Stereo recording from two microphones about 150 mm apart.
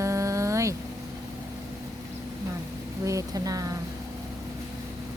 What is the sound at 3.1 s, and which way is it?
Speech, 20° right (ahead or behind).